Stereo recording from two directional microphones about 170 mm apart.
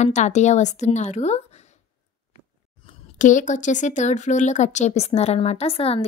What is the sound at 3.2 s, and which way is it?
A woman's voice, 45° left (ahead or behind).